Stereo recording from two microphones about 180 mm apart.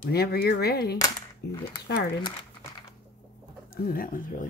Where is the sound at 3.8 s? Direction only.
55° left (ahead or behind).